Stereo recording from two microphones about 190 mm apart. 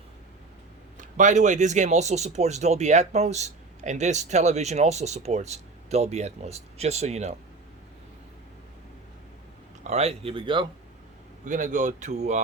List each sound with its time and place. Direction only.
0.9 s speech: 40° right (ahead or behind)
9.8 s speech: 35° right (ahead or behind)
11.4 s speech: 45° right (ahead or behind)